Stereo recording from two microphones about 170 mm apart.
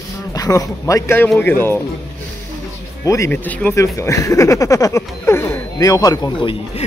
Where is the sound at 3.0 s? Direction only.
15° left (ahead or behind).